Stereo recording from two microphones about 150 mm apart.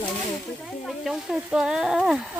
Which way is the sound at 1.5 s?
5° right (ahead or behind).